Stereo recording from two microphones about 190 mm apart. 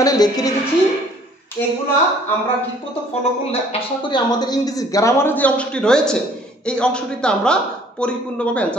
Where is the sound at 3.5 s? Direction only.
30° left (ahead or behind); by 8.8 s 5° left (ahead or behind).